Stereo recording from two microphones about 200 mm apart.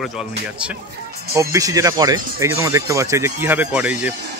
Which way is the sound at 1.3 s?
15° right (ahead or behind).